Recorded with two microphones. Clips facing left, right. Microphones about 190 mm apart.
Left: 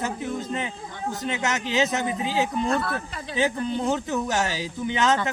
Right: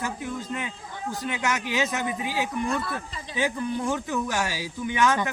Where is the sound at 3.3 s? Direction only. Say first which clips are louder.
Left 2 dB; 20° left (ahead or behind).